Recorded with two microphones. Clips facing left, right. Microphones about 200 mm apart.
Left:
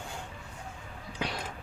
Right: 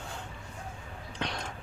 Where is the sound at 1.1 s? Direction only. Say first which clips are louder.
Left 1 dB; 5° left (ahead or behind).